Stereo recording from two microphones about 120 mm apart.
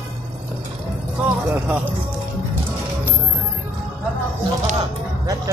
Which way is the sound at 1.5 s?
10° right (ahead or behind).